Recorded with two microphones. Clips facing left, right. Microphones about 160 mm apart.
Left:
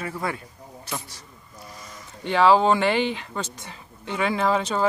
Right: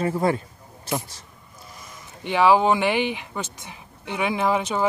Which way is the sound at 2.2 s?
15° right (ahead or behind).